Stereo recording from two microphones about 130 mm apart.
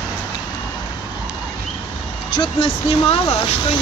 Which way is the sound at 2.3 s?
40° left (ahead or behind).